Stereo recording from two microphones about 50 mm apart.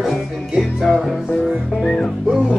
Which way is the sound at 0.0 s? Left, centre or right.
Centre.